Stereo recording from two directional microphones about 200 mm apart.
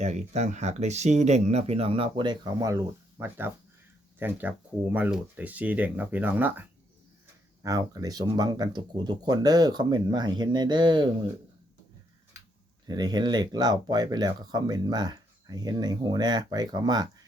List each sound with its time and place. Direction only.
0.0 s speech: 35° right (ahead or behind)
12.9 s speech: 20° right (ahead or behind)